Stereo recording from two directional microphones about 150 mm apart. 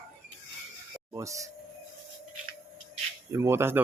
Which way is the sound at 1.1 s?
20° right (ahead or behind).